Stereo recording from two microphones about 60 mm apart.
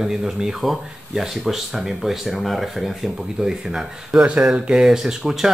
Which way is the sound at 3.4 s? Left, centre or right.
Centre.